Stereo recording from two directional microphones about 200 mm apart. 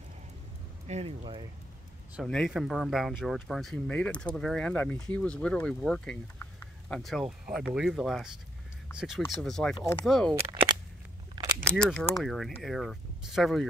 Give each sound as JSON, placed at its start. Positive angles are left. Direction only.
{"t": 0.8, "sound": "speech", "side_deg": -30}
{"t": 2.2, "sound": "speech", "side_deg": 0}
{"t": 10.5, "sound": "a sound", "side_deg": -20}
{"t": 11.7, "sound": "speech", "side_deg": 0}